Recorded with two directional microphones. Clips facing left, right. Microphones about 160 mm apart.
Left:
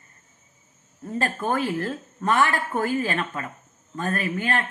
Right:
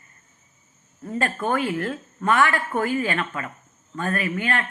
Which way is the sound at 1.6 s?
40° left (ahead or behind).